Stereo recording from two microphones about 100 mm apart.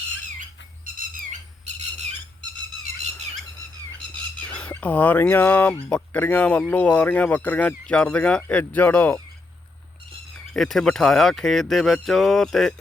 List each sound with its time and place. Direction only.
4.5 s speech: 15° left (ahead or behind)
10.3 s speech: 5° left (ahead or behind)